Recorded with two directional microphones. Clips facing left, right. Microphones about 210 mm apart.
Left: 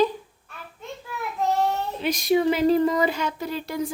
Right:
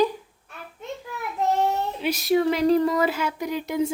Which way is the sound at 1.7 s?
10° right (ahead or behind).